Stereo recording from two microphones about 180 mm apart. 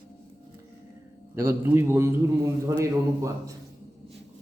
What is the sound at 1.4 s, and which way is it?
A man's voice, 15° right (ahead or behind).